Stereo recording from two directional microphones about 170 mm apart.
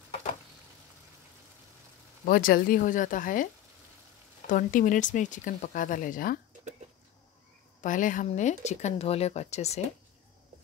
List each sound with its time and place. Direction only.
2.2 s speech: 60° left (ahead or behind)
4.5 s speech: 50° left (ahead or behind)
7.8 s speech: 50° left (ahead or behind)